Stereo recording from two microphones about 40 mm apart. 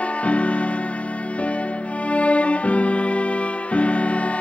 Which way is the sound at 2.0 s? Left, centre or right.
Left.